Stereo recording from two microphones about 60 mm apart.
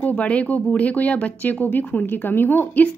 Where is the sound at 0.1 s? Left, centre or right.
Left.